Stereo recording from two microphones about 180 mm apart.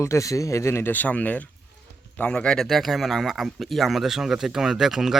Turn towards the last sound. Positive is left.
turn(degrees=0)  # may be behind; listen again after turning